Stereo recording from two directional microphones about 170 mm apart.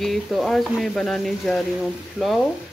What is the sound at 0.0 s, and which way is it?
Speech, centre (ahead or behind).